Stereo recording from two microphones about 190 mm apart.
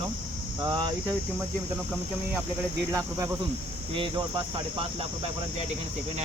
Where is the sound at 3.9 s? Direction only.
25° right (ahead or behind).